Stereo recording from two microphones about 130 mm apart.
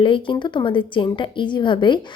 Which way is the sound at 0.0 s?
40° left (ahead or behind).